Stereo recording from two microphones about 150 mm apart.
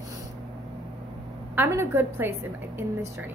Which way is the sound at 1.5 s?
15° right (ahead or behind).